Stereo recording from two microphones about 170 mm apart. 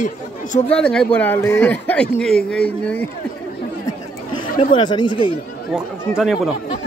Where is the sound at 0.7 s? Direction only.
5° left (ahead or behind).